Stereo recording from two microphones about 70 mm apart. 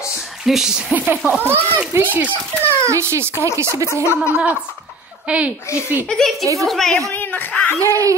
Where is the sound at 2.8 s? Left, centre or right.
Right.